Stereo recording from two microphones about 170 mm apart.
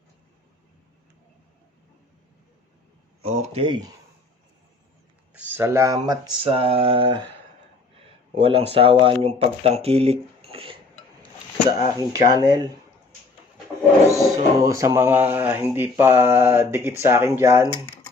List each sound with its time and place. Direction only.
3.2 s speech: 40° right (ahead or behind)
5.3 s speech: 10° right (ahead or behind); by 7.3 s 30° right (ahead or behind)
8.4 s speech: 35° right (ahead or behind)
11.9 s speech: 20° right (ahead or behind)
14.2 s speech: 20° right (ahead or behind)
17.7 s a sound: 25° left (ahead or behind)